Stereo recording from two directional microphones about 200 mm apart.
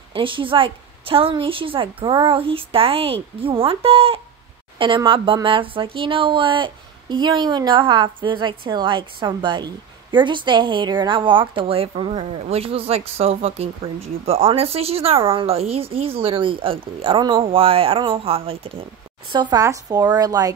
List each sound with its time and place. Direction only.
0.1 s speech: 25° right (ahead or behind)